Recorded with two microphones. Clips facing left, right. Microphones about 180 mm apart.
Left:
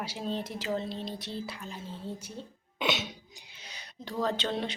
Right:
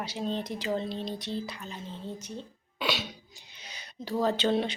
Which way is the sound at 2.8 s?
20° left (ahead or behind).